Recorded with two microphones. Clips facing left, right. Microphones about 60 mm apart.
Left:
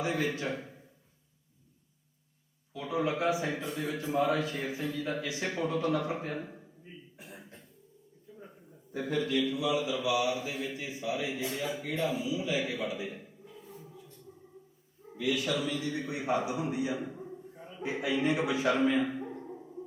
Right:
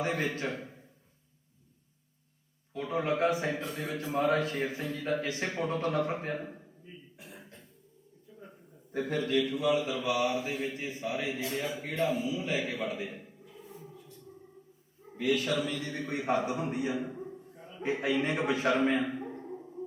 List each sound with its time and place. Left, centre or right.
0.0 s a man's voice: right
2.7 s a man's voice: right
7.2 s cough: left
8.9 s a man's voice: right
15.1 s a man's voice: right